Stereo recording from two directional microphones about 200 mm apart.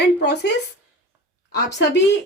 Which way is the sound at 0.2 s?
60° left (ahead or behind).